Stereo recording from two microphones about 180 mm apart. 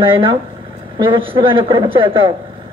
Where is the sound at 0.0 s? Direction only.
30° right (ahead or behind).